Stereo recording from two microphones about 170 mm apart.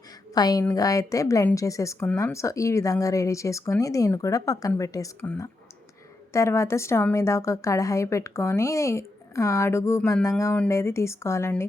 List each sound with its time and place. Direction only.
0.3 s a woman's voice: 20° left (ahead or behind)